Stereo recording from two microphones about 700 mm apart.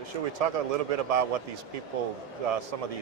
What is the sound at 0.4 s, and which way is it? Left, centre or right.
Speech, right.